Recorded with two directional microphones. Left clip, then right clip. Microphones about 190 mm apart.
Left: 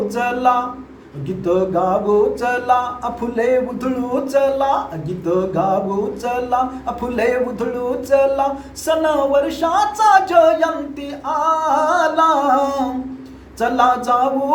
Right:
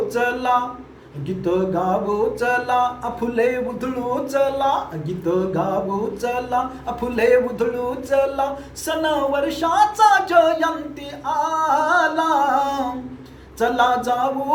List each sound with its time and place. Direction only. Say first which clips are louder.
0.1 s speech: left 4 dB; 10° left (ahead or behind)